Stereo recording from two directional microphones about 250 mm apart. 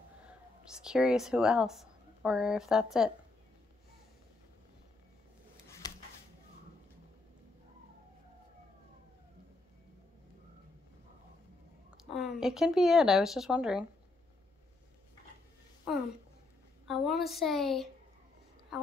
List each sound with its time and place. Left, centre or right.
0.3 s speech: centre
5.7 s a sound: centre
11.9 s speech: centre
16.8 s a woman's voice: centre